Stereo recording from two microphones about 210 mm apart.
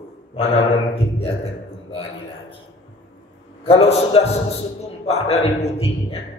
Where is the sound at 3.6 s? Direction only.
30° left (ahead or behind).